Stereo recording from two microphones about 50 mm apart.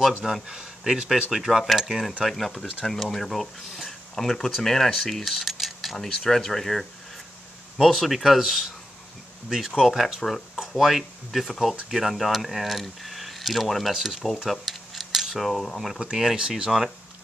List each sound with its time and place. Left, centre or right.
0.2 s speech: centre
1.3 s speech: centre
16.0 s speech: centre